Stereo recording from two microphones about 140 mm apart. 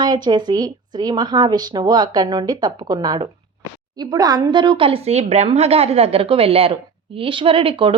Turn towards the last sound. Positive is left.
turn(degrees=-40)  # may be behind; listen again after turning